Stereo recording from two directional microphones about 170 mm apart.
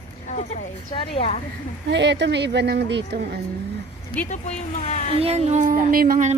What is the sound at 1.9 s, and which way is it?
Speech, 90° right.